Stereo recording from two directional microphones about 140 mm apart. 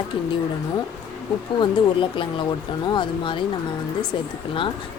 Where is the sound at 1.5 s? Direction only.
35° left (ahead or behind).